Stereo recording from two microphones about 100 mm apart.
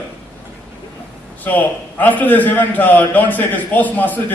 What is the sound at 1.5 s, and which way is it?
A man's voice, 15° left (ahead or behind).